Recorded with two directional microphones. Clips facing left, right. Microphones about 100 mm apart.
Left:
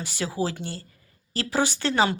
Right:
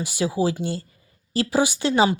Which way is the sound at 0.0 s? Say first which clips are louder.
Right 5 dB; 15° right (ahead or behind).